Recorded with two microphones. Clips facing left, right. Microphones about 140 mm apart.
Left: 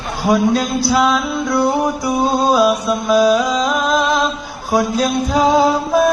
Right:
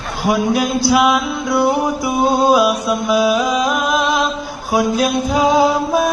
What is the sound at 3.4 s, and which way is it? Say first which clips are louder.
Music: even; 10° right (ahead or behind).